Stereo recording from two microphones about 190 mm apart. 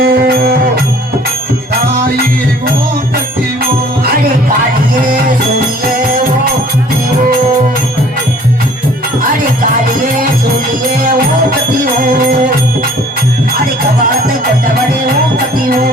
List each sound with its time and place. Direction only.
0.0 s music: 50° right (ahead or behind)